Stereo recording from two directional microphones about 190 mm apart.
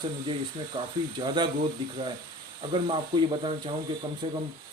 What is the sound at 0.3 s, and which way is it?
Speech, 25° right (ahead or behind).